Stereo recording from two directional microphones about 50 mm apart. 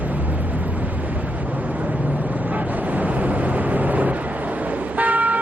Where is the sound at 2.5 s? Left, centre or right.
Right.